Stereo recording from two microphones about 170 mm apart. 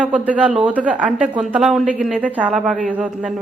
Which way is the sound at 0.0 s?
10° right (ahead or behind).